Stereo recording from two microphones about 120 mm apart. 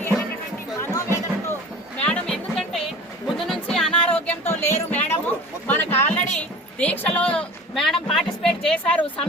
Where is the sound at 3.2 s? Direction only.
Centre (ahead or behind).